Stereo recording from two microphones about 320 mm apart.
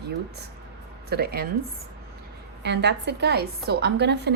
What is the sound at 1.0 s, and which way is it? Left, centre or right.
Speech, right.